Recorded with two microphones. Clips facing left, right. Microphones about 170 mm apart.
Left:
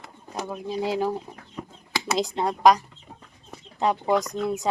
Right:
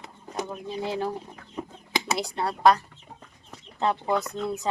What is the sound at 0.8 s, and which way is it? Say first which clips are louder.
Speech: left 4 dB; 15° left (ahead or behind).